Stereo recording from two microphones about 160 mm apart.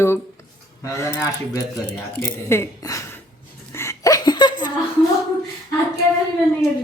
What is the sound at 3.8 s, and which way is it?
Laughter, 20° left (ahead or behind).